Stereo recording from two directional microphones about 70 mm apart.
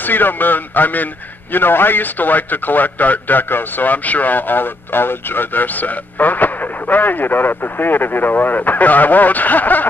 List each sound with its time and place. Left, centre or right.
0.0 s a man's voice: left